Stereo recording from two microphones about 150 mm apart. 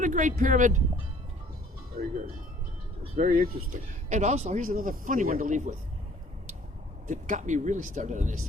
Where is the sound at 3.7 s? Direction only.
50° right (ahead or behind).